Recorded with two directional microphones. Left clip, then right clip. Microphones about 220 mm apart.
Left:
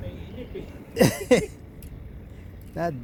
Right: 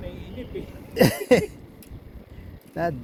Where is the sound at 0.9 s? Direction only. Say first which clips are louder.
Right 1 dB; 5° left (ahead or behind).